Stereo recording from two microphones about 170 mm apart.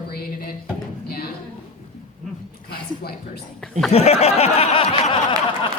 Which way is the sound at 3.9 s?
40° left (ahead or behind).